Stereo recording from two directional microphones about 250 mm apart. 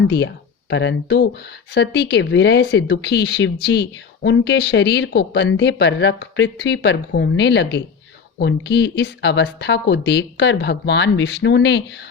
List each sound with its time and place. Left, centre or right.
0.7 s speech: left